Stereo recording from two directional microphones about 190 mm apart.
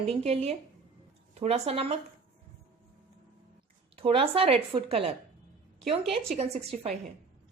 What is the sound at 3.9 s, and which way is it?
A woman's voice, 30° right (ahead or behind).